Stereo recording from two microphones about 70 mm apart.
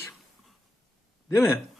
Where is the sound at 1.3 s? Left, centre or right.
Left.